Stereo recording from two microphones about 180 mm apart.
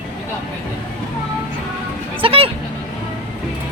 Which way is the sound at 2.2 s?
30° right (ahead or behind).